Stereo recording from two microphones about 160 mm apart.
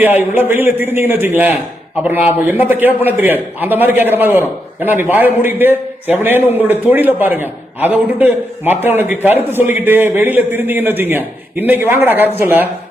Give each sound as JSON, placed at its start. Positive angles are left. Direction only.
{"t": 0.0, "sound": "a man's voice", "side_deg": -10}